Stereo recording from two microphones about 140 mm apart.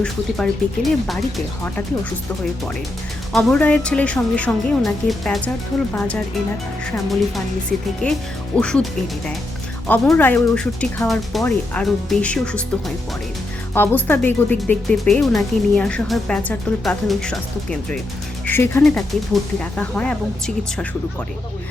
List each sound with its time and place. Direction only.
0.0 s speech: 5° left (ahead or behind)
3.3 s speech: 10° left (ahead or behind)
13.7 s speech: 15° left (ahead or behind)
18.4 s speech: 15° left (ahead or behind)
18.8 s speech: 5° left (ahead or behind)